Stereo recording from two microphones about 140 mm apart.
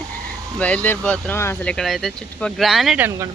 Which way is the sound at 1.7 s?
Centre (ahead or behind).